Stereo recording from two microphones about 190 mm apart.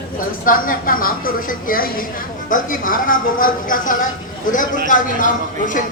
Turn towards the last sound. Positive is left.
turn(degrees=45)  # may be behind; listen again after turning